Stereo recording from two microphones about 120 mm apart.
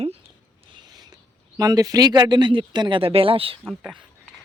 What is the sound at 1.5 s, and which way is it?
Speech, 30° right (ahead or behind).